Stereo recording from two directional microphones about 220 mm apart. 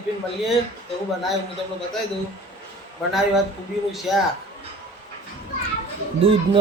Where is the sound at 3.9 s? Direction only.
Centre (ahead or behind).